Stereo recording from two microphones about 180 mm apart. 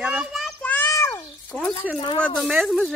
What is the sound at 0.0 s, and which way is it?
Child singing, 5° right (ahead or behind).